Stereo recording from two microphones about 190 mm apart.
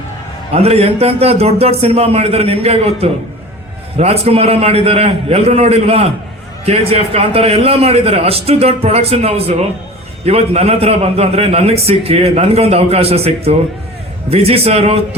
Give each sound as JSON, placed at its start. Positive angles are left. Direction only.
{"t": 0.5, "sound": "a man's voice", "side_deg": -30}